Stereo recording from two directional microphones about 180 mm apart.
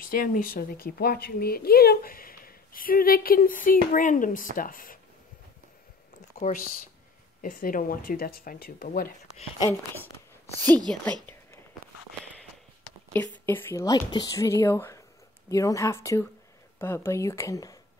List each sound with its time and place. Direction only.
0.0 s speech: 50° left (ahead or behind)
6.3 s speech: 45° left (ahead or behind)
9.6 s speech: 15° left (ahead or behind)
10.6 s speech: 20° right (ahead or behind)
13.1 s speech: 10° left (ahead or behind)